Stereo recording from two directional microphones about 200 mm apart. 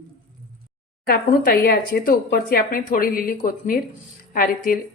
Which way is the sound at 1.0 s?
50° left (ahead or behind).